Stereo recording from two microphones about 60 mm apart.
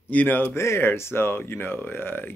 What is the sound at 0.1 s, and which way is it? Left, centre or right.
Speech, left.